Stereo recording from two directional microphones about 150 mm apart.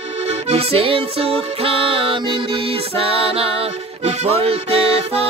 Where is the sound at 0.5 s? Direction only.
40° right (ahead or behind).